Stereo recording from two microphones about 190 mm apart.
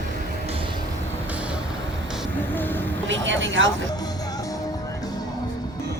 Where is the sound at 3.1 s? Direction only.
80° right.